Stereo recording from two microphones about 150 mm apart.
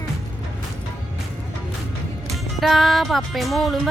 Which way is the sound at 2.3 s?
Centre (ahead or behind).